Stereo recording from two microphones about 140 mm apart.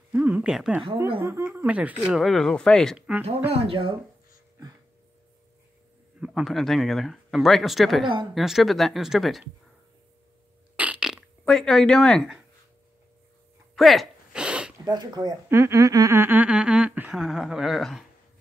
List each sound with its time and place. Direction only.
0.1 s speech: 10° right (ahead or behind)
1.2 s speech: 15° right (ahead or behind); by 3.0 s 5° left (ahead or behind)
3.5 s speech: 40° right (ahead or behind)
6.2 s speech: centre (ahead or behind)
10.8 s fart: 10° right (ahead or behind)
13.7 s a sound: centre (ahead or behind)
14.9 s speech: 30° right (ahead or behind); by 18.0 s centre (ahead or behind)